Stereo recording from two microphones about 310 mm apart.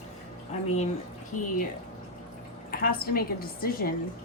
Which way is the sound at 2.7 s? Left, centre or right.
Left.